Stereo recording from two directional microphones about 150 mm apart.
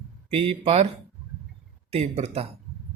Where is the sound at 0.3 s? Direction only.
40° right (ahead or behind).